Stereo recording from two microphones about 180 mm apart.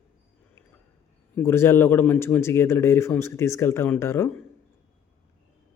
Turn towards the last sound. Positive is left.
turn(degrees=15)  # may be behind; listen again after turning